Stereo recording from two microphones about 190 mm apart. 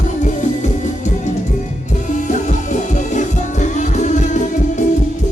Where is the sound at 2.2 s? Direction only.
40° left (ahead or behind).